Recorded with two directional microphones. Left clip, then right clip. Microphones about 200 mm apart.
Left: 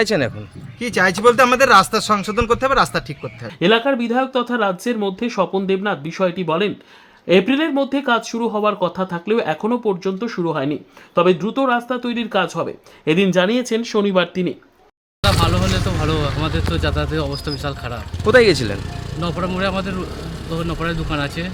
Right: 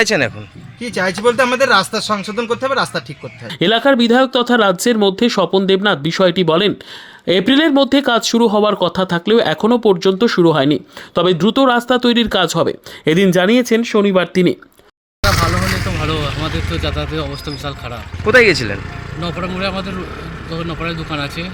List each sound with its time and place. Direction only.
0.0 s speech: centre (ahead or behind)
3.6 s speech: 30° right (ahead or behind)
15.6 s vehicle: 25° right (ahead or behind)
16.0 s speech: 5° left (ahead or behind)
18.3 s speech: 5° right (ahead or behind)
18.8 s speech: 10° left (ahead or behind)